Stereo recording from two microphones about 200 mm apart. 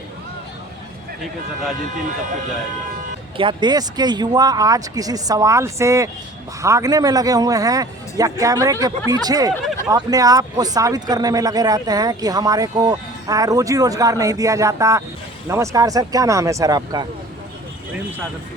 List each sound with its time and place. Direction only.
3.3 s speech: 25° right (ahead or behind)